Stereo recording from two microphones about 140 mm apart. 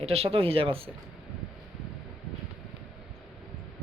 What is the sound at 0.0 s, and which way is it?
Speech, 45° right (ahead or behind).